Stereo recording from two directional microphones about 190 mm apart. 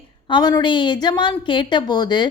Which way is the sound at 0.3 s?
20° left (ahead or behind).